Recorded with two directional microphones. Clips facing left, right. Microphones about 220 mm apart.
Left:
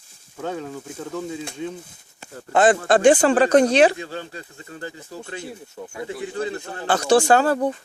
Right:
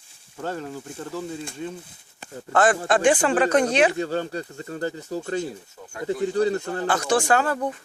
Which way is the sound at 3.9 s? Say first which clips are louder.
Right 7 dB; 45° right (ahead or behind).